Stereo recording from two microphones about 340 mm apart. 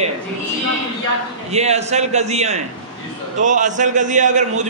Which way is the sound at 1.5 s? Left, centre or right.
Centre.